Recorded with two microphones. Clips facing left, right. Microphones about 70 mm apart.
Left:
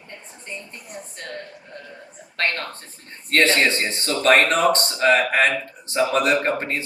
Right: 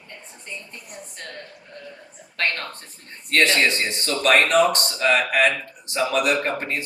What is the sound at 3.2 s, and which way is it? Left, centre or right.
Speech, left.